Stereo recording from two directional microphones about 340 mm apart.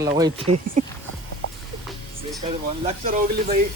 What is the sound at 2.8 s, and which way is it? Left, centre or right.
Speech, right.